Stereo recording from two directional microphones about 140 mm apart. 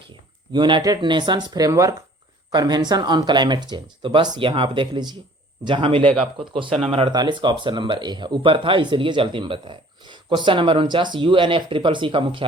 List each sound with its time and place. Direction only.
0.5 s speech: 30° right (ahead or behind)
7.1 s speech: 30° right (ahead or behind)